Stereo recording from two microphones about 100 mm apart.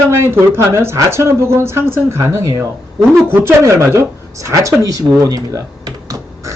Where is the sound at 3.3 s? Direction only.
25° right (ahead or behind).